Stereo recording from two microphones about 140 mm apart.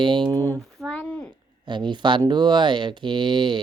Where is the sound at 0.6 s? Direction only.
Centre (ahead or behind).